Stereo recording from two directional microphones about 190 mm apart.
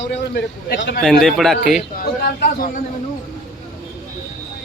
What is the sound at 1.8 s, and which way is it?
A man's voice, 50° left (ahead or behind).